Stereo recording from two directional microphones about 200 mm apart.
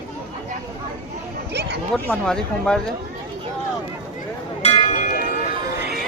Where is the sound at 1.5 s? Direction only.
55° right (ahead or behind).